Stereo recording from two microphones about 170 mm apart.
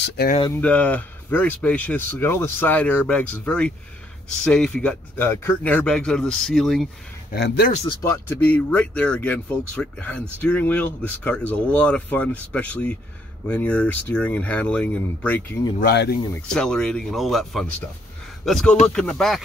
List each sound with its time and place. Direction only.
0.5 s speech: 10° left (ahead or behind)
7.3 s speech: 70° left (ahead or behind)
8.0 s speech: 15° left (ahead or behind)
15.8 s speech: 70° left (ahead or behind)
16.3 s speech: 5° left (ahead or behind)